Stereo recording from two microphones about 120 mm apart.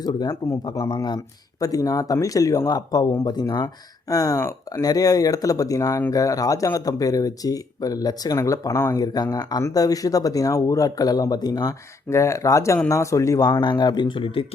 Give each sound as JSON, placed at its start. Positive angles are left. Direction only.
{"t": 0.0, "sound": "speech", "side_deg": 35}